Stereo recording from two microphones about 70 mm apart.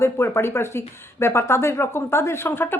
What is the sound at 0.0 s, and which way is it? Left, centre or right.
Speech, left.